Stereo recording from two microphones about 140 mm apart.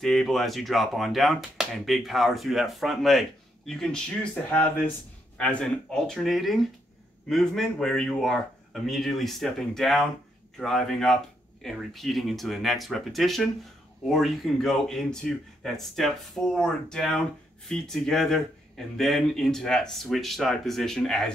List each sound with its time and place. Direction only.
0.0 s speech: centre (ahead or behind)
4.5 s speech: 15° left (ahead or behind)